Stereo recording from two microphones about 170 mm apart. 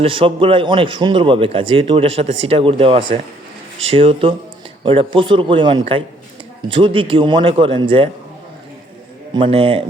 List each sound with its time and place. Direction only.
0.0 s a man's voice: 30° right (ahead or behind)
9.3 s a man's voice: 30° right (ahead or behind)